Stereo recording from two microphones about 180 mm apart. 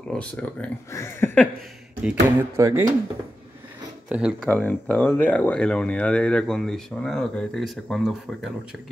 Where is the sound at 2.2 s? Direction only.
15° right (ahead or behind).